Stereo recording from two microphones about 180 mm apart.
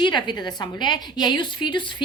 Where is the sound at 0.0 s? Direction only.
25° left (ahead or behind).